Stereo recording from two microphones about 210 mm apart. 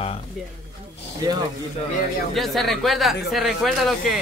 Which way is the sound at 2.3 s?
Centre (ahead or behind).